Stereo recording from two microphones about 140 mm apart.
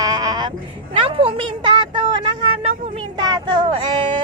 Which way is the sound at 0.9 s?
40° right (ahead or behind).